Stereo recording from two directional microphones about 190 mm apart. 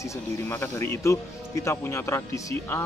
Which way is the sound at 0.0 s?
15° left (ahead or behind).